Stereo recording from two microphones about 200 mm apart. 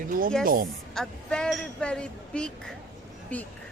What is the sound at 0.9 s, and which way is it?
Speech, 5° left (ahead or behind).